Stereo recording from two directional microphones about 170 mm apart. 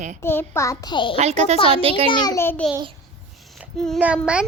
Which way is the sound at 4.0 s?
5° right (ahead or behind).